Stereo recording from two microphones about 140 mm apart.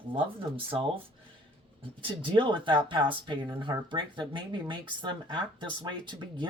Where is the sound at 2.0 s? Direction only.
35° right (ahead or behind).